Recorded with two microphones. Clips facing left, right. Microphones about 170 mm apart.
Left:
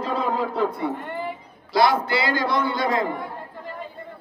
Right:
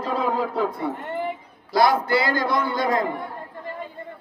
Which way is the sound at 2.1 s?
45° right (ahead or behind).